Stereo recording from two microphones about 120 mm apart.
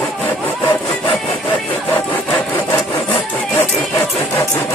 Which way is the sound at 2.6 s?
20° left (ahead or behind).